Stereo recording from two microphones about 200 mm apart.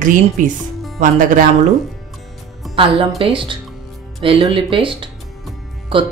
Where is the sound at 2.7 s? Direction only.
25° right (ahead or behind).